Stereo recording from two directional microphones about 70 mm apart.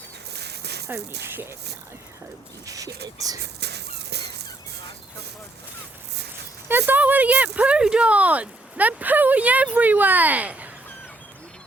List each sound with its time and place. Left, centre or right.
0.9 s speech: right
2.6 s speech: right
6.7 s speech: right